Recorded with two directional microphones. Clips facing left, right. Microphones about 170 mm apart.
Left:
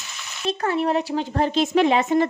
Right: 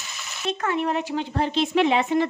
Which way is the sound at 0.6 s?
35° left (ahead or behind).